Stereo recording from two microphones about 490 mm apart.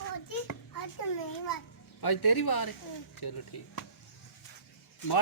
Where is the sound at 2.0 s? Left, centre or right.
Left.